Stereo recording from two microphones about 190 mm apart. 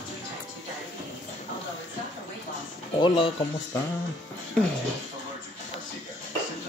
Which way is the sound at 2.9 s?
25° left (ahead or behind).